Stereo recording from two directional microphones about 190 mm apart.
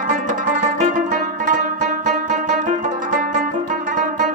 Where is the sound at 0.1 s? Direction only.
40° right (ahead or behind).